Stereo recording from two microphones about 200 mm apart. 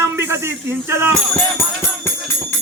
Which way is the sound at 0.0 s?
15° right (ahead or behind).